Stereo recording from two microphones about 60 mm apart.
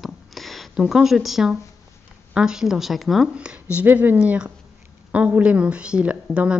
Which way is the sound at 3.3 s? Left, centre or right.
Centre.